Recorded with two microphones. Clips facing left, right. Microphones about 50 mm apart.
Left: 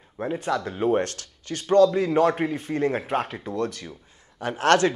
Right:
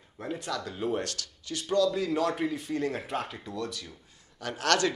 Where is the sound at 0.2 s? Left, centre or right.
Left.